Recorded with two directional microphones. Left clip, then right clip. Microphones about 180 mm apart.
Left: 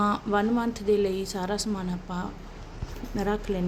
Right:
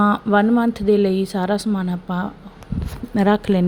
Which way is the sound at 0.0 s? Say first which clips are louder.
Right 8 dB; 30° right (ahead or behind).